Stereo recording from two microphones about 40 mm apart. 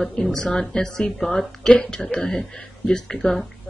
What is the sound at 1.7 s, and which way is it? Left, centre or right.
Speech, left.